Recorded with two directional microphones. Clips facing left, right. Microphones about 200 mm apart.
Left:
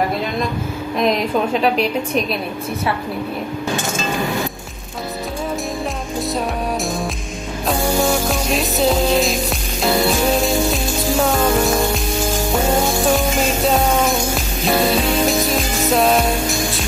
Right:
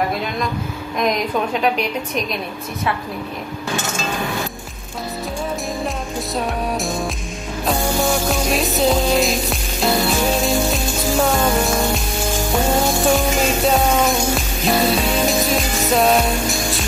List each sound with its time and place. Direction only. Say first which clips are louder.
6.3 s music: right 1 dB; centre (ahead or behind)
13.1 s music: even; centre (ahead or behind)